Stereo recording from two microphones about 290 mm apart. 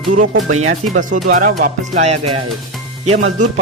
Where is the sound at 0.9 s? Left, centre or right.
Right.